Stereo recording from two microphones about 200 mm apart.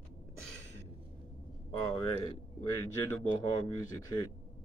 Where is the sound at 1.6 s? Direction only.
20° left (ahead or behind).